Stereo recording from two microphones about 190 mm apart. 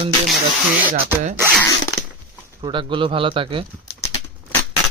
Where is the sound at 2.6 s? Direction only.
25° right (ahead or behind).